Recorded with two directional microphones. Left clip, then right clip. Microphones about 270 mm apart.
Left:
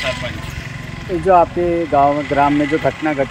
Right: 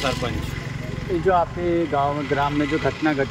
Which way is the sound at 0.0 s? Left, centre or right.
Centre.